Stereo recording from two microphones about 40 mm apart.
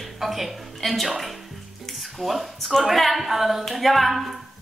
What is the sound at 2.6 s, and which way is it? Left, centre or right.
Speech, centre.